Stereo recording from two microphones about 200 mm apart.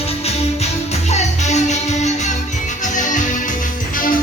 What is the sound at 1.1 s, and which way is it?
Music, 35° left (ahead or behind).